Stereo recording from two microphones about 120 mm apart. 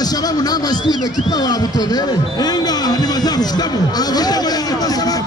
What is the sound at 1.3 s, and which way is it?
Music, 35° left (ahead or behind).